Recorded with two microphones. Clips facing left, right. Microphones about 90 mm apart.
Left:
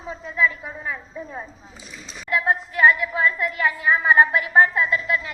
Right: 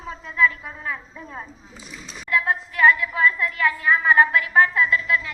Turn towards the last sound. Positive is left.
turn(degrees=30)  # may be behind; listen again after turning